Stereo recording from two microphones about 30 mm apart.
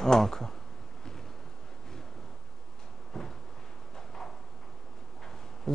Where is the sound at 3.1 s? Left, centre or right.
Centre.